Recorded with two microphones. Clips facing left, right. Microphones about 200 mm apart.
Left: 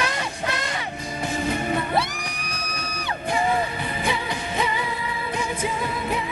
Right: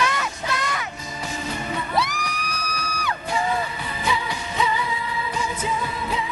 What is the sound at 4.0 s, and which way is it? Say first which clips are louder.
Music: right 1 dB; 55° left (ahead or behind).